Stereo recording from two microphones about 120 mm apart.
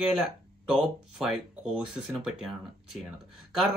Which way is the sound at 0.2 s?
5° right (ahead or behind).